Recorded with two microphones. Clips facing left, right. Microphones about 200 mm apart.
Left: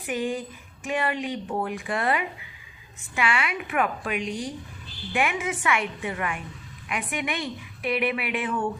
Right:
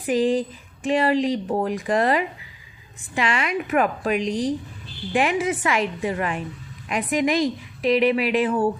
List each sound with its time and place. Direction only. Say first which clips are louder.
0.0 s speech: right 8 dB; 35° right (ahead or behind)